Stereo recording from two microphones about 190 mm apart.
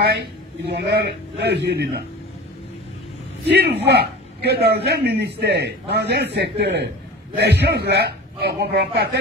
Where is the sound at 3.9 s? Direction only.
60° right (ahead or behind).